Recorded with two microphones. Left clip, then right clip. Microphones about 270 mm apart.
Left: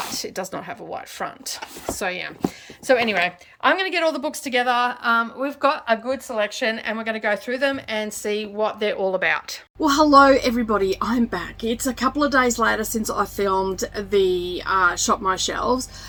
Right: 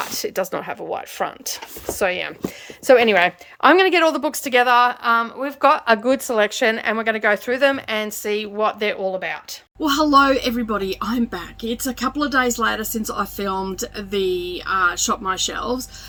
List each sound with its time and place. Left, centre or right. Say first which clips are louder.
0.1 s speech: right 5 dB; centre
5.8 s a woman's voice: right 5 dB; right; by 15.9 s centre